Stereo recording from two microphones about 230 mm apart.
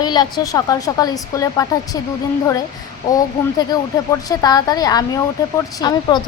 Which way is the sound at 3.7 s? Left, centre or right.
Centre.